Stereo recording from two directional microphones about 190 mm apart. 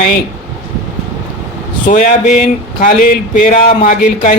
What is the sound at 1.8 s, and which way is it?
Speech, 40° left (ahead or behind).